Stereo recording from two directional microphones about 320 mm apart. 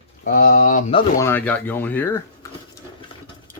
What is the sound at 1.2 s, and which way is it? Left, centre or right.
Speech, centre.